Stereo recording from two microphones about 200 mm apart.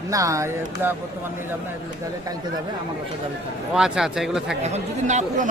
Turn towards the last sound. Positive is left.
turn(degrees=-35)  # may be behind; listen again after turning